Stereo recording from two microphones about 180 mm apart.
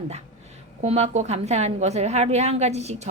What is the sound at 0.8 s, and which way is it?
A woman's voice, 35° right (ahead or behind).